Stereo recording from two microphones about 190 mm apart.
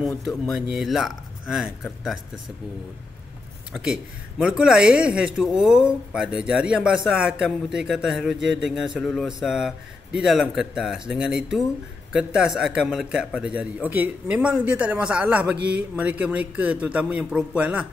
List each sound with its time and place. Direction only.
0.5 s a man's voice: centre (ahead or behind)
3.7 s a man's voice: 5° right (ahead or behind)